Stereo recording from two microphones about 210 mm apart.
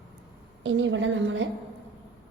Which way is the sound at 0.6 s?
65° right (ahead or behind).